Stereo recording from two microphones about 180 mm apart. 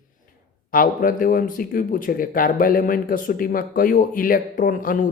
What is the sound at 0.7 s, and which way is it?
Speech, 50° left (ahead or behind).